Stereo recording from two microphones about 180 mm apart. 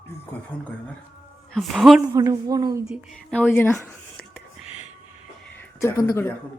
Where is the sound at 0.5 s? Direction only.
5° left (ahead or behind).